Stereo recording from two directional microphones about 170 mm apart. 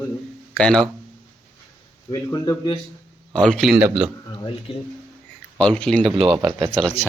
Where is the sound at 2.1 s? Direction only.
15° left (ahead or behind).